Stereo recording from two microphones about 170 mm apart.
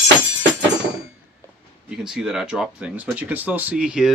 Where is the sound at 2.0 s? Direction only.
5° right (ahead or behind).